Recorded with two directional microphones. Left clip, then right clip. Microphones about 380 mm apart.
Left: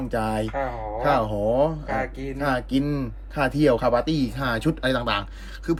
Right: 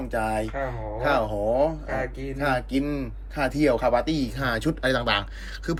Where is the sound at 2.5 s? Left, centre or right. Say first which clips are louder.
Left 1 dB; centre.